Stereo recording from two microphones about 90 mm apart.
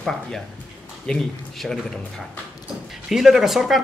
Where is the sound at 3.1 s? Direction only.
5° right (ahead or behind).